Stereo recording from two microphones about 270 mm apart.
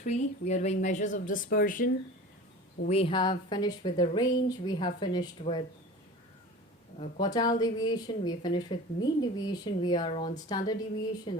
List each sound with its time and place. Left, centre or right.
0.0 s a woman's voice: left
7.0 s a woman's voice: centre